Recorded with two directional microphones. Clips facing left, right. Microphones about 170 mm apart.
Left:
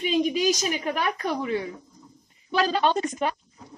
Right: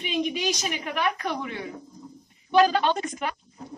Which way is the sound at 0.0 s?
35° left (ahead or behind).